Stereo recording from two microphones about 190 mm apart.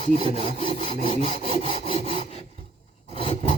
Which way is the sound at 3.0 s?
30° left (ahead or behind).